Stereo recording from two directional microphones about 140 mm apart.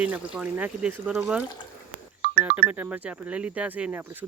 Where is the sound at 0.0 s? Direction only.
10° right (ahead or behind).